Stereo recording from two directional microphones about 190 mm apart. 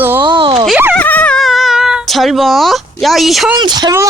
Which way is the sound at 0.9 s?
10° left (ahead or behind).